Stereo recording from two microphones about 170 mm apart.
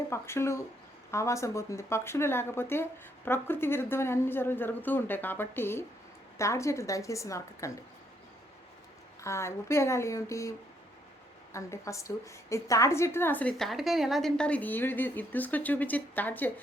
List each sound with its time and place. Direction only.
0.1 s a woman's voice: 15° left (ahead or behind)
9.2 s a woman's voice: 15° left (ahead or behind)
11.5 s a woman's voice: 15° left (ahead or behind)